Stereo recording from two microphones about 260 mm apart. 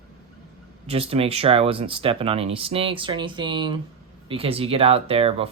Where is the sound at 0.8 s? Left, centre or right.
Right.